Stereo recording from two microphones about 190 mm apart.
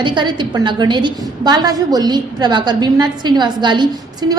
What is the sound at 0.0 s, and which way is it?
A woman's voice, 25° right (ahead or behind).